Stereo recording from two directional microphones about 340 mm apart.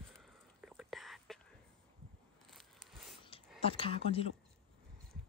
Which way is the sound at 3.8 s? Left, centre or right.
Centre.